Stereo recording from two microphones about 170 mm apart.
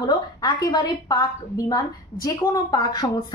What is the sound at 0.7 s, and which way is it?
A woman's voice, 25° left (ahead or behind).